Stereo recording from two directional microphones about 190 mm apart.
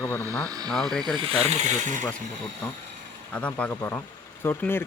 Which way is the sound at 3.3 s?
5° left (ahead or behind).